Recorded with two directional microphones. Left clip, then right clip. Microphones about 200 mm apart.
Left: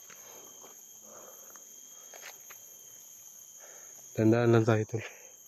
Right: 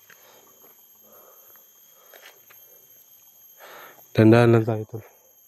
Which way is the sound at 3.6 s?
40° right (ahead or behind).